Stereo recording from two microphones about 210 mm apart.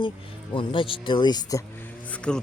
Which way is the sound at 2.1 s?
5° left (ahead or behind).